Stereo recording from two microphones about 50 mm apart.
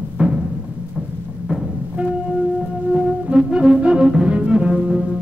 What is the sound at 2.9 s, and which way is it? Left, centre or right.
Music, centre.